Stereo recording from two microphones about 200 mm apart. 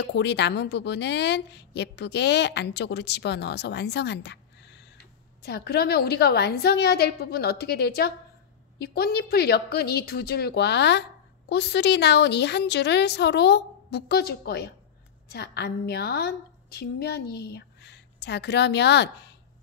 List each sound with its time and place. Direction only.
0.0 s a woman's voice: 60° left (ahead or behind)